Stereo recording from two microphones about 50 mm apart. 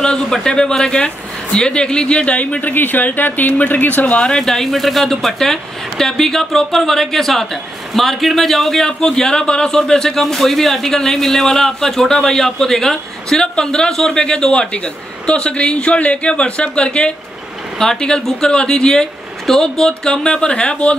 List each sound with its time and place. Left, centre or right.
0.0 s speech: centre; by 4.2 s left
4.2 s a man's voice: centre